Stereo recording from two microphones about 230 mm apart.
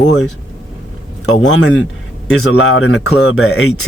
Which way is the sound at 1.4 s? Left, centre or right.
Left.